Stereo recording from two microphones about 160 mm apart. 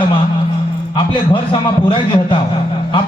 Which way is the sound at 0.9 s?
30° left (ahead or behind).